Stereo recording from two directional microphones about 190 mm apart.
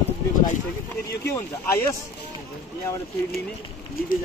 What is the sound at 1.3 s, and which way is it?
Speech, 15° left (ahead or behind).